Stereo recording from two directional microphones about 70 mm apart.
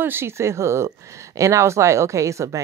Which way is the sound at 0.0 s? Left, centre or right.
Right.